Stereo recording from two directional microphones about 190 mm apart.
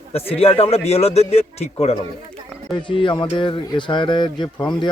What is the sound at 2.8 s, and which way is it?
Speech, 25° left (ahead or behind).